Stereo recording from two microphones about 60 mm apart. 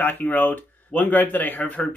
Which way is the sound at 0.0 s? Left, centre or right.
Left.